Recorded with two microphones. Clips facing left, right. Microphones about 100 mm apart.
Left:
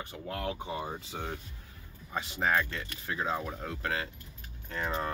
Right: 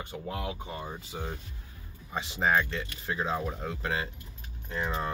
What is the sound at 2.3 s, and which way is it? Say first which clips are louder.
Speech: right 3 dB; 20° right (ahead or behind).